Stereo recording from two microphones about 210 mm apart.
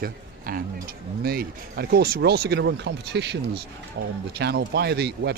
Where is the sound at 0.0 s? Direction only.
45° right (ahead or behind).